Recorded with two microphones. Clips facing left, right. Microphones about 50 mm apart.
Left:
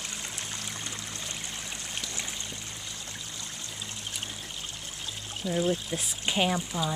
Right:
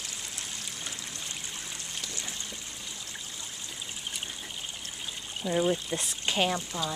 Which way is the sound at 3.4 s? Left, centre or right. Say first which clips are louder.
Left 1 dB; centre.